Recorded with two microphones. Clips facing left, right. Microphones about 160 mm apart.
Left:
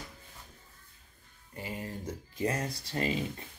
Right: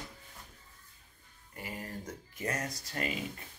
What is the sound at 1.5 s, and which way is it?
Speech, 25° left (ahead or behind).